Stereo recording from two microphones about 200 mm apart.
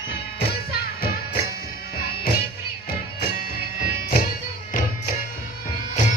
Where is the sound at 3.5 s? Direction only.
50° left (ahead or behind).